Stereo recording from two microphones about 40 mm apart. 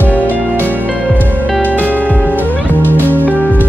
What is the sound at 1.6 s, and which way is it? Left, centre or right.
Music, left.